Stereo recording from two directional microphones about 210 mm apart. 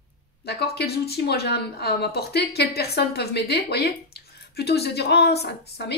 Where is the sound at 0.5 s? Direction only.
50° left (ahead or behind).